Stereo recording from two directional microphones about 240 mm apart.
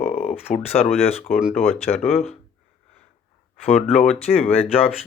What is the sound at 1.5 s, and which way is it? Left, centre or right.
Speech, left.